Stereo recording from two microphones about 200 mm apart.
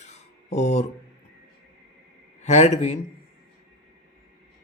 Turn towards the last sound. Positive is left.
turn(degrees=35)  # may be behind; listen again after turning